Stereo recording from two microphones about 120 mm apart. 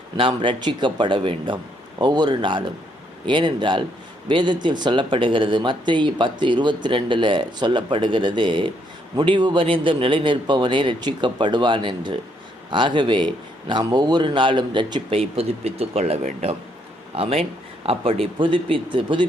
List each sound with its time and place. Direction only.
0.2 s a man's voice: 45° right (ahead or behind)
15.1 s a man's voice: 55° right (ahead or behind)